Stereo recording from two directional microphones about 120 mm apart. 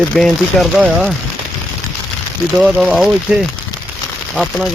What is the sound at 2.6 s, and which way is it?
Speech, 5° right (ahead or behind).